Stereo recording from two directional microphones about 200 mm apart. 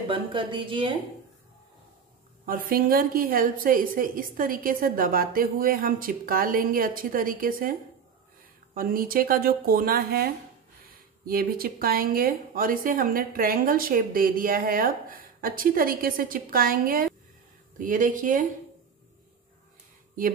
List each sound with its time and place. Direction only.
0.1 s a woman's voice: 25° right (ahead or behind)
2.4 s speech: 45° right (ahead or behind)
8.7 s speech: 45° right (ahead or behind)